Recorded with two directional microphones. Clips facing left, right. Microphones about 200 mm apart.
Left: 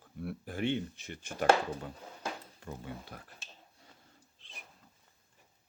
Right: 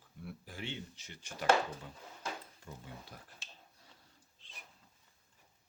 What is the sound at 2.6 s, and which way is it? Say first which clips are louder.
Speech: left 7 dB; 65° left (ahead or behind).